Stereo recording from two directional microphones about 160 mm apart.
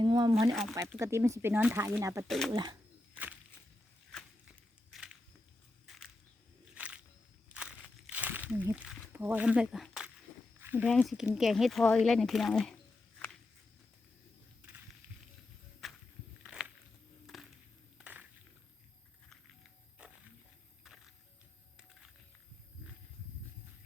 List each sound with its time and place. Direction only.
0.0 s a sound: 25° right (ahead or behind)
0.7 s speech: 20° right (ahead or behind)
2.2 s speech: centre (ahead or behind)
2.5 s speech: 25° right (ahead or behind)
4.1 s walk: 5° left (ahead or behind)
4.9 s crushing: 5° right (ahead or behind)
6.7 s a sound: 10° right (ahead or behind)
7.5 s crumpling: 5° right (ahead or behind)
10.8 s speech: centre (ahead or behind)
16.4 s walk: 5° right (ahead or behind)
17.2 s a sound: centre (ahead or behind)
20.8 s music: centre (ahead or behind)